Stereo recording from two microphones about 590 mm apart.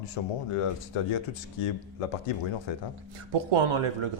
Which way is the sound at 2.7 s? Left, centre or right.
Left.